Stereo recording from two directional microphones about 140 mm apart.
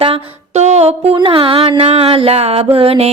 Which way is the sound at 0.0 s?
45° right (ahead or behind).